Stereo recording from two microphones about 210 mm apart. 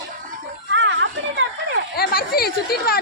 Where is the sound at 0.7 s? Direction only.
60° right (ahead or behind).